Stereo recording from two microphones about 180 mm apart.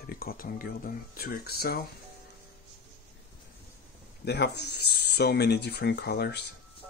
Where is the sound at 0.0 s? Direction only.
55° left (ahead or behind).